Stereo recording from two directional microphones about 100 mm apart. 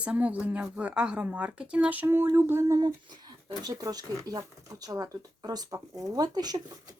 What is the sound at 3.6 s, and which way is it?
A woman's voice, 35° right (ahead or behind).